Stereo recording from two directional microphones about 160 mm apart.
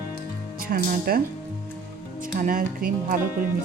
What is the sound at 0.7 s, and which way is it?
Speech, 65° right (ahead or behind).